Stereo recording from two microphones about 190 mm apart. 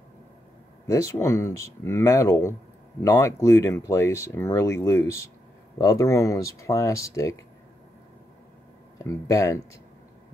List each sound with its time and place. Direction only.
0.8 s speech: 15° left (ahead or behind)
8.9 s speech: 15° left (ahead or behind)